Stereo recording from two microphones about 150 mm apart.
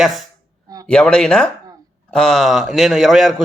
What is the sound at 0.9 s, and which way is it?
A man's voice, 5° left (ahead or behind).